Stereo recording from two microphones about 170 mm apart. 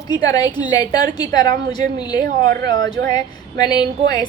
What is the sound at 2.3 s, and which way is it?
Speech, 55° right (ahead or behind).